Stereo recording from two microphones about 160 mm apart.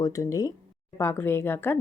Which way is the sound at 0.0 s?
20° left (ahead or behind).